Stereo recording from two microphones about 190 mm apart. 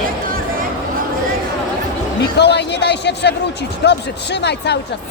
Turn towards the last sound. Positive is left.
turn(degrees=60)  # may be behind; listen again after turning